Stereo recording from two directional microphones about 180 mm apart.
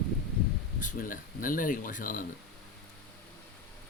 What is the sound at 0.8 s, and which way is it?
Speech, 45° left (ahead or behind).